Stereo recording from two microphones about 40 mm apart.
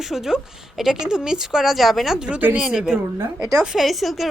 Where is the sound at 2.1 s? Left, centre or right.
Right.